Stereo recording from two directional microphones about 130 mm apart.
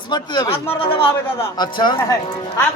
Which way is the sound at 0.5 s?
45° left (ahead or behind).